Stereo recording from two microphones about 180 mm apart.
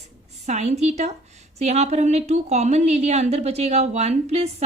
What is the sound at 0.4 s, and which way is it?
A woman's voice, 40° right (ahead or behind).